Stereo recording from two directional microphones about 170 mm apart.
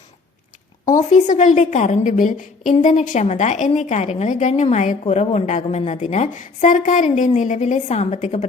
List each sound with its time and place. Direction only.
0.9 s a woman's voice: 50° left (ahead or behind)